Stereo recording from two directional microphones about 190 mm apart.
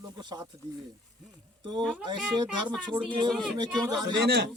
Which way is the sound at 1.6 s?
20° right (ahead or behind).